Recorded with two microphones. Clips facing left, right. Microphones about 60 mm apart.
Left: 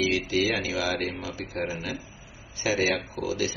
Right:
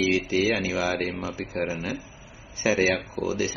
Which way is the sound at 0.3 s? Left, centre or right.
Right.